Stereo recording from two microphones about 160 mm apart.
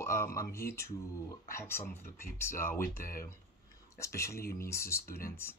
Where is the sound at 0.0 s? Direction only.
15° left (ahead or behind).